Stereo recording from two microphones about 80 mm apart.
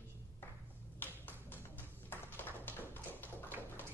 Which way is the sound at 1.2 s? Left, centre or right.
Left.